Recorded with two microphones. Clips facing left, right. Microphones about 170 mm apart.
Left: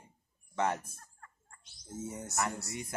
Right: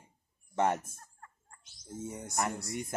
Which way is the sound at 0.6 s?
25° right (ahead or behind).